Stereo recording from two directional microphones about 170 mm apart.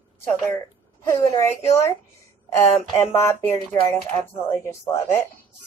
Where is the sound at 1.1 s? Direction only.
20° left (ahead or behind).